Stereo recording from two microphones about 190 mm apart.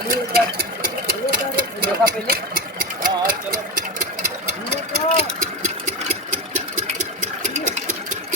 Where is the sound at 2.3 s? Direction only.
50° right (ahead or behind).